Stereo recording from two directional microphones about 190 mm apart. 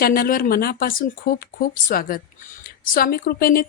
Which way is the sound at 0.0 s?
50° left (ahead or behind).